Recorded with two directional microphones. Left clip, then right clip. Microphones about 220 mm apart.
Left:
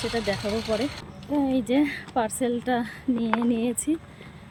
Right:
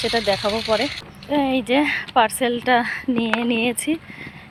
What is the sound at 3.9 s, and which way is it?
Speech, 25° right (ahead or behind).